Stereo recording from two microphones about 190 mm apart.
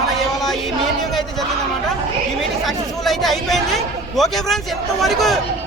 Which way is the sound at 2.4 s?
Centre (ahead or behind).